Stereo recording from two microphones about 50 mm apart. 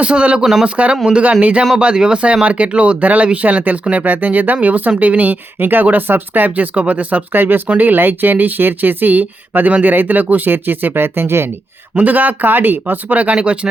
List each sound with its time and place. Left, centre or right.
0.0 s speech: right
7.3 s speech: right
11.9 s speech: right